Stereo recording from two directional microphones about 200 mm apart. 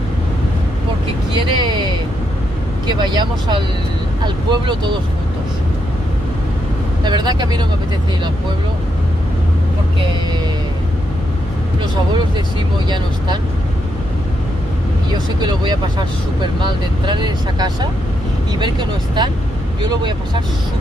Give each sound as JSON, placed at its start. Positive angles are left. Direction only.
{"t": 1.3, "sound": "vehicle", "side_deg": -25}
{"t": 2.9, "sound": "speech", "side_deg": -20}
{"t": 7.1, "sound": "speech", "side_deg": -20}
{"t": 15.4, "sound": "speech", "side_deg": -20}